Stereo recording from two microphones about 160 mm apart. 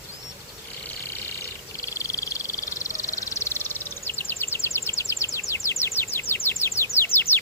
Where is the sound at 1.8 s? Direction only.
20° left (ahead or behind).